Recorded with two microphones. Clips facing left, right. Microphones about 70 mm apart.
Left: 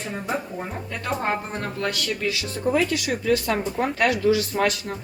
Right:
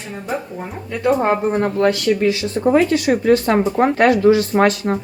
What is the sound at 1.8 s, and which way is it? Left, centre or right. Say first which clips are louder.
A woman's voice: right 9 dB; right.